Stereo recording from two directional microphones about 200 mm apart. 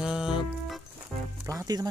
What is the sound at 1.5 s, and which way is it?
Speech, 15° right (ahead or behind).